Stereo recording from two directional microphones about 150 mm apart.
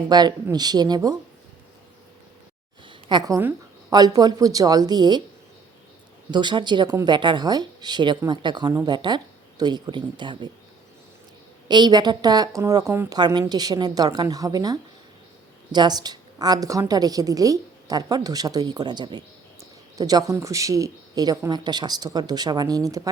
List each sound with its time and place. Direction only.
0.1 s speech: 30° right (ahead or behind)
3.1 s speech: 25° right (ahead or behind)
6.3 s speech: 30° right (ahead or behind)
11.7 s speech: 30° right (ahead or behind)